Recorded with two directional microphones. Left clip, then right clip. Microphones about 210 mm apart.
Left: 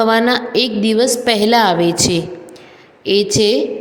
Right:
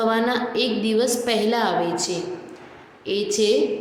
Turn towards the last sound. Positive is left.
turn(degrees=35)  # may be behind; listen again after turning